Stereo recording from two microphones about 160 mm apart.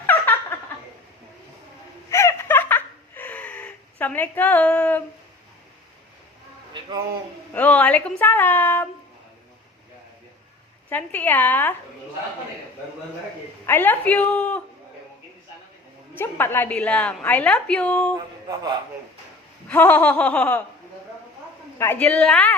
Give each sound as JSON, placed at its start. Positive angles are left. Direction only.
{"t": 2.0, "sound": "laughter", "side_deg": 20}
{"t": 7.5, "sound": "a woman's voice", "side_deg": 10}
{"t": 10.8, "sound": "a woman's voice", "side_deg": 10}
{"t": 13.7, "sound": "a woman's voice", "side_deg": 10}
{"t": 16.1, "sound": "a woman's voice", "side_deg": 15}
{"t": 18.4, "sound": "speech", "side_deg": -25}
{"t": 19.6, "sound": "a woman's voice", "side_deg": 10}
{"t": 21.8, "sound": "a woman's voice", "side_deg": 10}